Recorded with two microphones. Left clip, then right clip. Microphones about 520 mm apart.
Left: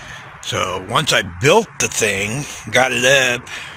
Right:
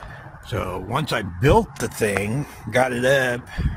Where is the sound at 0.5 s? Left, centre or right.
Right.